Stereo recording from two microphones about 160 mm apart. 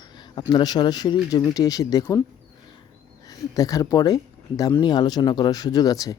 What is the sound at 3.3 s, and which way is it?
Speech, 20° left (ahead or behind).